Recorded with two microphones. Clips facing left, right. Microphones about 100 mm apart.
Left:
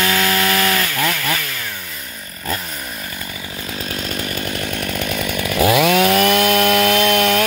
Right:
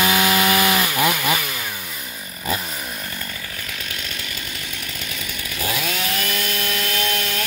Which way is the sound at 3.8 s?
35° left (ahead or behind).